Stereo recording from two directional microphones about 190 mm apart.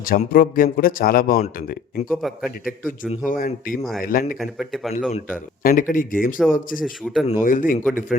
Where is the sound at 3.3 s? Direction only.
50° left (ahead or behind).